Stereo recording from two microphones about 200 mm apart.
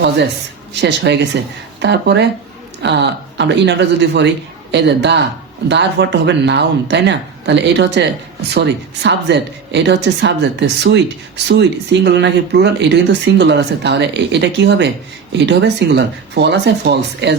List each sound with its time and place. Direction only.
0.7 s speech: 60° right (ahead or behind)